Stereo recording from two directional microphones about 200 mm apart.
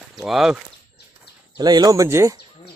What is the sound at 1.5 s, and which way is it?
Speech, 20° right (ahead or behind).